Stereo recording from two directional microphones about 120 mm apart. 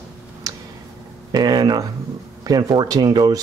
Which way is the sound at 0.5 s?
30° right (ahead or behind).